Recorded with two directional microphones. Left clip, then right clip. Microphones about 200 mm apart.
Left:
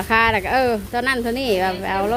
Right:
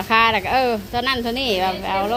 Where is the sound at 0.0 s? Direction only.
25° left (ahead or behind).